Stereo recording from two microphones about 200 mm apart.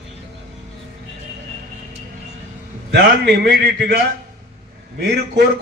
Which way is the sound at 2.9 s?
55° right (ahead or behind).